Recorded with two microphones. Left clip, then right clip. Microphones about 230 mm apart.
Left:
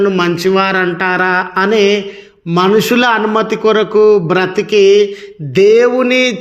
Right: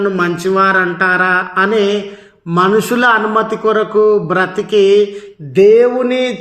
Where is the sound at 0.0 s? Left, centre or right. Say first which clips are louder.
Left 3 dB; left.